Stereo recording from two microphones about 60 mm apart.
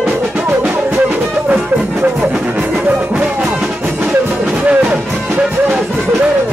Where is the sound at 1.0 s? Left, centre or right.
Right.